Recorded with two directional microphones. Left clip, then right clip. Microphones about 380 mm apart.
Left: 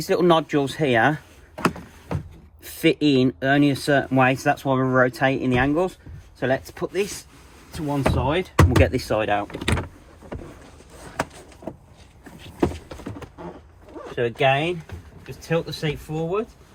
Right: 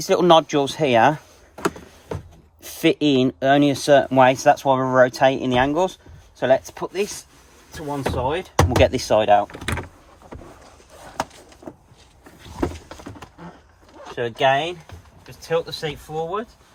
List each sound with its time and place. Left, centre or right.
0.0 s speech: centre
2.6 s speech: centre
14.2 s speech: right